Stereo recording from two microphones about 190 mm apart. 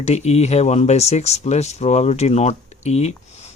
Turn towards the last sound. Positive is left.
turn(degrees=35)  # may be behind; listen again after turning